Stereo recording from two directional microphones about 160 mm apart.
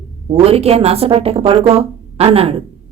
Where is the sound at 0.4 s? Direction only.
40° right (ahead or behind).